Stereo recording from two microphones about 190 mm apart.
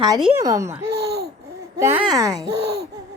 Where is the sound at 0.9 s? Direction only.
60° right (ahead or behind).